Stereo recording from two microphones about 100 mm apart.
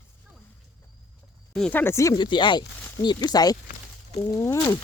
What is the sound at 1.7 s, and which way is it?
Speech, 20° left (ahead or behind).